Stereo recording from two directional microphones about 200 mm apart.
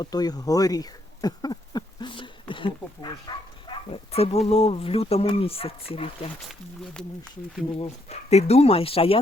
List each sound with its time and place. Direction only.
0.0 s speech: 20° left (ahead or behind)
7.8 s speech: 30° left (ahead or behind)